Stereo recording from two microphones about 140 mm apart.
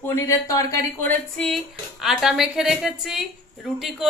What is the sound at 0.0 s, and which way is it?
Speech, 20° left (ahead or behind).